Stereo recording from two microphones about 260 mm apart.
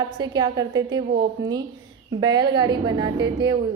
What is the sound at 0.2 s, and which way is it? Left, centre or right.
A woman's voice, centre.